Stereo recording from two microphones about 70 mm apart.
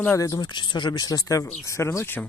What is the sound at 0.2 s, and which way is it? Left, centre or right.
Speech, left.